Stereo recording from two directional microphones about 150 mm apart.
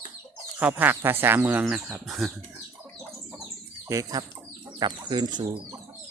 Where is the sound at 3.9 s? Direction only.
25° right (ahead or behind).